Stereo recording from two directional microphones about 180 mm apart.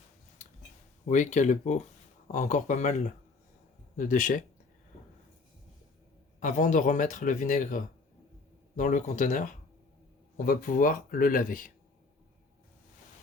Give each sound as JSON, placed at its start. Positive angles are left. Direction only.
{"t": 0.4, "sound": "a sound", "side_deg": 40}
{"t": 1.0, "sound": "speech", "side_deg": 40}
{"t": 6.4, "sound": "speech", "side_deg": 45}